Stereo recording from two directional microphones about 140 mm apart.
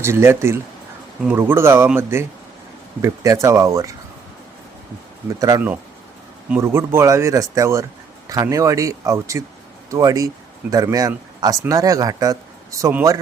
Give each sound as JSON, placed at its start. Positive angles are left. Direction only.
{"t": 0.0, "sound": "speech", "side_deg": -20}
{"t": 3.4, "sound": "speech", "side_deg": -20}
{"t": 5.4, "sound": "speech", "side_deg": -25}